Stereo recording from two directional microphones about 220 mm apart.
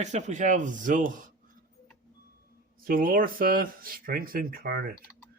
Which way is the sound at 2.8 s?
40° right (ahead or behind).